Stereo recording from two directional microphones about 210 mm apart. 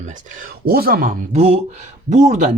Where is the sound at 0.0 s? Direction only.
35° right (ahead or behind).